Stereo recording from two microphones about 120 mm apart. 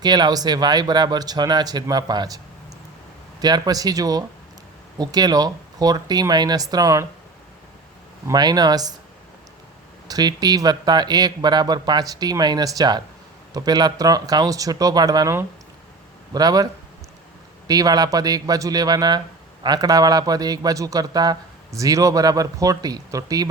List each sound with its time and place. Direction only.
0.0 s a man's voice: 35° right (ahead or behind)
3.4 s a man's voice: 35° right (ahead or behind)
8.3 s a man's voice: 35° right (ahead or behind)
10.1 s a man's voice: 35° right (ahead or behind)
17.7 s a man's voice: 30° right (ahead or behind)